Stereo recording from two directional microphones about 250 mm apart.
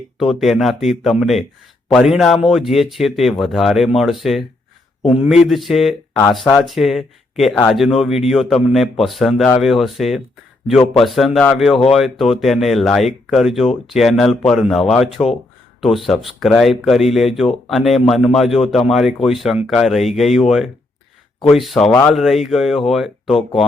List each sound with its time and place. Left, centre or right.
0.2 s speech: centre